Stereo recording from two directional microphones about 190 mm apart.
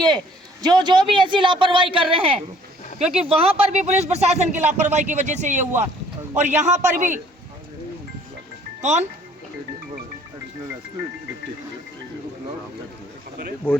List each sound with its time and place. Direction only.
0.6 s speech: 20° right (ahead or behind); by 7.2 s 40° right (ahead or behind)
8.8 s speech: 40° right (ahead or behind)